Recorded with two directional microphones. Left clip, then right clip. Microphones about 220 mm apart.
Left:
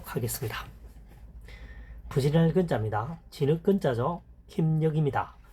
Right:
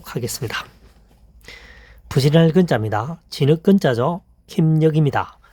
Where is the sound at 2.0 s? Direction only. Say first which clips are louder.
Right 10 dB; 55° right (ahead or behind).